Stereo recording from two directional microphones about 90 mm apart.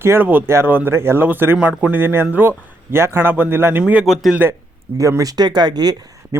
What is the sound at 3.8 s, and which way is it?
Speech, 10° right (ahead or behind).